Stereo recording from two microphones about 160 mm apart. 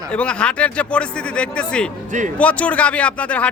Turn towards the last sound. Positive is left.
turn(degrees=10)  # may be behind; listen again after turning